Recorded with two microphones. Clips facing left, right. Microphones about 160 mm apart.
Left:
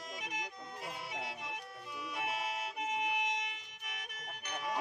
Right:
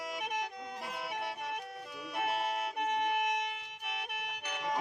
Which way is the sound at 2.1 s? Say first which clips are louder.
Right 6 dB; 60° right (ahead or behind).